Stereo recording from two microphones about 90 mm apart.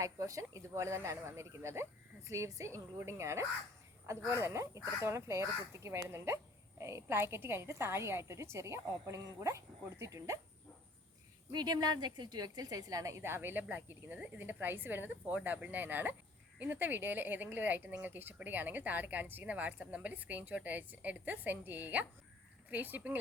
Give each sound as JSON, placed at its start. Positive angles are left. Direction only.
{"t": 0.0, "sound": "speech", "side_deg": -40}
{"t": 11.5, "sound": "a woman's voice", "side_deg": -50}